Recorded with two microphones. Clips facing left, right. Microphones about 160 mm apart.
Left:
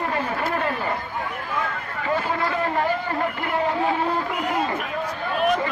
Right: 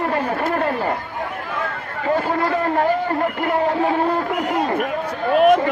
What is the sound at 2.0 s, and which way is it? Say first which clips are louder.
Run: right 5 dB; 45° right (ahead or behind).